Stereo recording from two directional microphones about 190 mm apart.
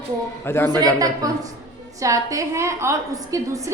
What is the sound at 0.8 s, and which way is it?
A woman's voice, 20° right (ahead or behind).